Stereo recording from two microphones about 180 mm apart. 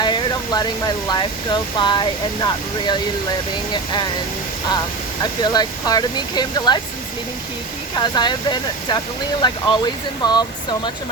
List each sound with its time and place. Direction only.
0.0 s speech: 25° left (ahead or behind)
5.2 s speech: 20° left (ahead or behind)
7.9 s speech: 25° left (ahead or behind)